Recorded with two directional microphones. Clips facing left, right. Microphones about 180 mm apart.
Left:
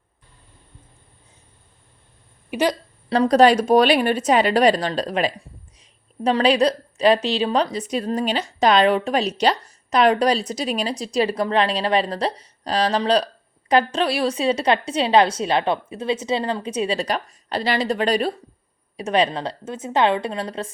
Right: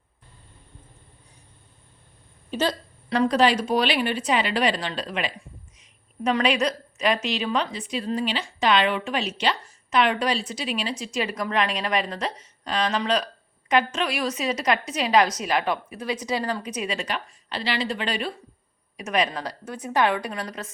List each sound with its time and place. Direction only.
2.5 s speech: 15° left (ahead or behind)
3.1 s a woman's voice: 35° left (ahead or behind)